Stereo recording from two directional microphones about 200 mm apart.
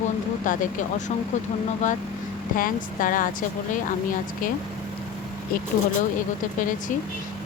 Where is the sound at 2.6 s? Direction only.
45° left (ahead or behind).